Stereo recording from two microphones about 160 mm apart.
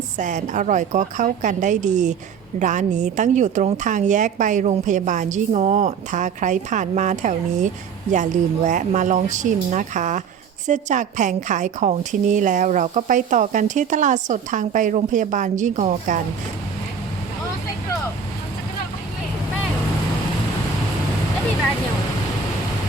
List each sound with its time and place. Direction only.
0.2 s a woman's voice: 50° right (ahead or behind)